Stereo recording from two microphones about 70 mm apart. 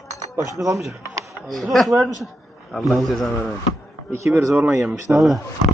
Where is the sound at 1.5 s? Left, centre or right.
Centre.